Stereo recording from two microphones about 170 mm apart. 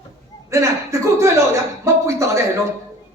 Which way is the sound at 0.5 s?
15° right (ahead or behind).